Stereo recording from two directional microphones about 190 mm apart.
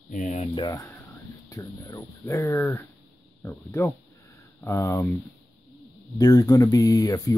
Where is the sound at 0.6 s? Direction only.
20° left (ahead or behind).